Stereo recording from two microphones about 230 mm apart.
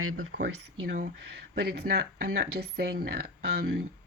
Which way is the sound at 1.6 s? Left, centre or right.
Right.